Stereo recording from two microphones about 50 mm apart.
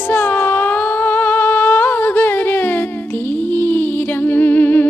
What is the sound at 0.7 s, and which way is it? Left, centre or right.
Humming, left.